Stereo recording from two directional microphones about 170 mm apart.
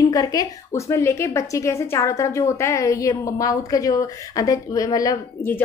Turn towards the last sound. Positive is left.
turn(degrees=15)  # may be behind; listen again after turning